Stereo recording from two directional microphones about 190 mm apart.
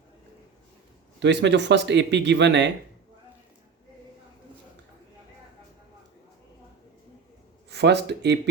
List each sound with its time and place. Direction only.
1.2 s speech: 65° right (ahead or behind)
7.7 s speech: 60° right (ahead or behind)